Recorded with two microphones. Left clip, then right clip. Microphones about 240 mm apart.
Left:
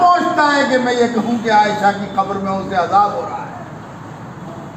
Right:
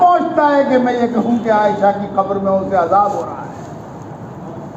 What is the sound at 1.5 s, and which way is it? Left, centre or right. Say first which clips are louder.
Speech: left 1 dB; left.